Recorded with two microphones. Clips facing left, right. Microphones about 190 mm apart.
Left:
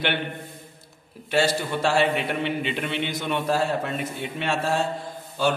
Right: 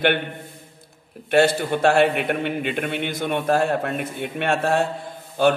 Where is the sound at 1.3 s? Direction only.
55° right (ahead or behind).